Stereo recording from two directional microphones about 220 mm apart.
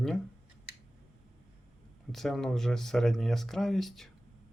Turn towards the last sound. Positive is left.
turn(degrees=0)  # may be behind; listen again after turning